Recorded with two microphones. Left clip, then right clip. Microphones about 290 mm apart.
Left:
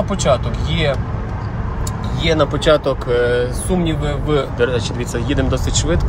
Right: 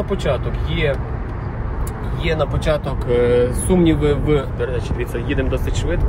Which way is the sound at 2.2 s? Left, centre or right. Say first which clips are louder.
Left 5 dB; left.